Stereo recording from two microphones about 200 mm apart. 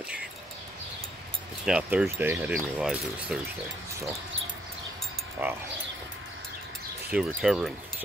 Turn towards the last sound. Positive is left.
turn(degrees=0)  # may be behind; listen again after turning